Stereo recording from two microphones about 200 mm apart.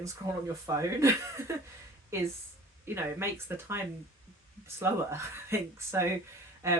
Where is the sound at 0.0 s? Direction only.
15° right (ahead or behind).